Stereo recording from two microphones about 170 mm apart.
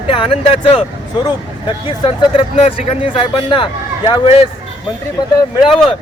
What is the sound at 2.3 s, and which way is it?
Speech, 30° left (ahead or behind).